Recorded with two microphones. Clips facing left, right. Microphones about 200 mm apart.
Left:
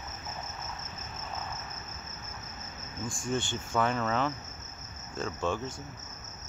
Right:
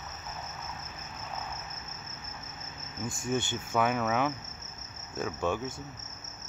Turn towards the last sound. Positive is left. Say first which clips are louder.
# right 1 dB
turn(degrees=-10)  # may be behind; listen again after turning